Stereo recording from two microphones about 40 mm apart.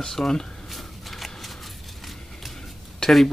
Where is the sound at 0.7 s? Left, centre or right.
Centre.